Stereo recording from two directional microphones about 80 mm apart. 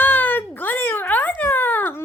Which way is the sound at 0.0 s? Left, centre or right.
Left.